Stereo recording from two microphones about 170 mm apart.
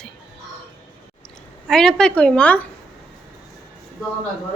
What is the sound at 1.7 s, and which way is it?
Speech, 5° left (ahead or behind).